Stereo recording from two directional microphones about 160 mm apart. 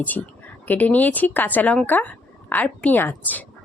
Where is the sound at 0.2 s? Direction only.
10° left (ahead or behind).